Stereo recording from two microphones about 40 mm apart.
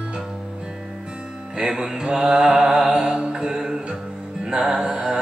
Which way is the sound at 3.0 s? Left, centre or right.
Right.